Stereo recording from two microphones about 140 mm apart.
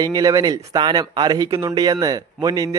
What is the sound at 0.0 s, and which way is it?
A man's voice, 25° right (ahead or behind).